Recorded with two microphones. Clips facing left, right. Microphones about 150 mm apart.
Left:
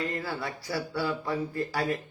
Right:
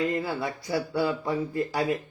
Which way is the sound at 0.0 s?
20° right (ahead or behind).